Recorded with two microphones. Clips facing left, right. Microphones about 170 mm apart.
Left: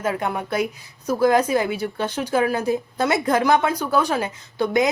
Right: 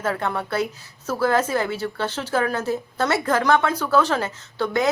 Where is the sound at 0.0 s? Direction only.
15° left (ahead or behind).